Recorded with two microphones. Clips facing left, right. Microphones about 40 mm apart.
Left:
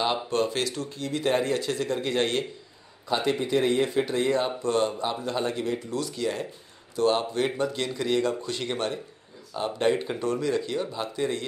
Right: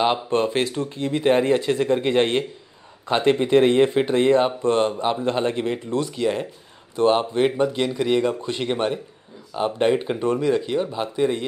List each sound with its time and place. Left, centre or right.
0.0 s speech: right
3.1 s speech: right